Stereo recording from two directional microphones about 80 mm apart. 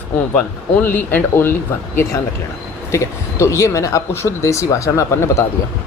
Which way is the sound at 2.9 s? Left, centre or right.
Left.